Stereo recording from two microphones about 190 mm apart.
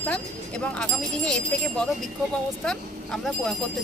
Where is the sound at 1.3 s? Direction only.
5° left (ahead or behind).